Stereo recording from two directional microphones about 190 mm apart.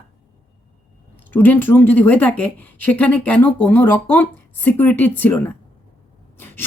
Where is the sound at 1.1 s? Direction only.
10° left (ahead or behind).